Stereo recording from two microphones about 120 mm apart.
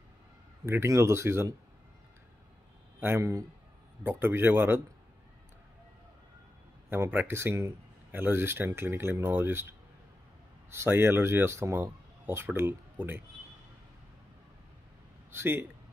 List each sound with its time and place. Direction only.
0.7 s speech: 20° right (ahead or behind)
3.0 s speech: 20° right (ahead or behind)
6.9 s speech: 15° right (ahead or behind)
15.3 s a man's voice: 20° right (ahead or behind)